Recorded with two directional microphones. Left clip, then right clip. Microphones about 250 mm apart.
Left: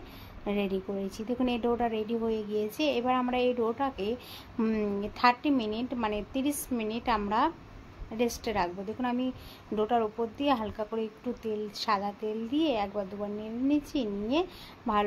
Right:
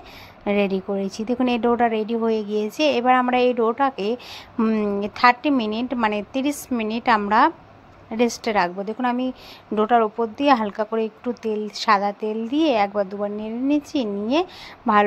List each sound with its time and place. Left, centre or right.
0.5 s a woman's voice: centre